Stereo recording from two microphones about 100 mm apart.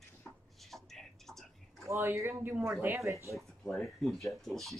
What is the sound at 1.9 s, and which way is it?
Speech, 25° right (ahead or behind).